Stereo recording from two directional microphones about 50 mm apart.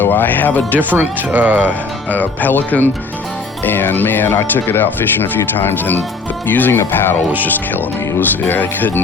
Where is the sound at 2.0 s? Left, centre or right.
Left.